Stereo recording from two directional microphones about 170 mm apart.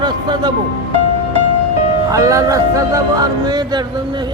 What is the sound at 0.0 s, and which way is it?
Music, 25° right (ahead or behind).